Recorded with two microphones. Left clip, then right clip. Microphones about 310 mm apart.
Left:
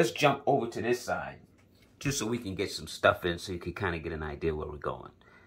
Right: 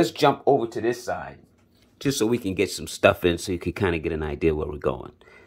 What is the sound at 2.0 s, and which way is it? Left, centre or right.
Speech, right.